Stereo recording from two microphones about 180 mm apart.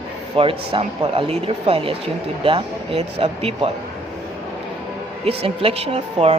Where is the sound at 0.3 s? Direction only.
30° right (ahead or behind).